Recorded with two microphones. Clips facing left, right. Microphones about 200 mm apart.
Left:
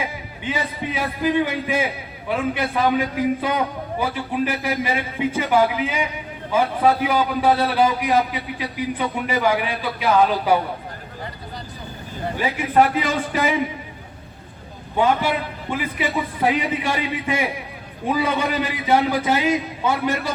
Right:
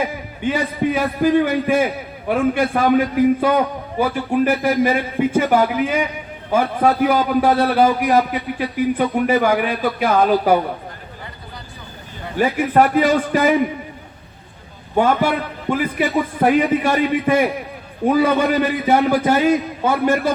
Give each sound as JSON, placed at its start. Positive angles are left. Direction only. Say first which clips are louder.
{"t": 0.0, "sound": "a man's voice", "louder": "right 7 dB", "side_deg": -50}
{"t": 12.4, "sound": "a man's voice", "louder": "right 3 dB", "side_deg": -50}
{"t": 14.9, "sound": "a man's voice", "louder": "right 3 dB", "side_deg": -45}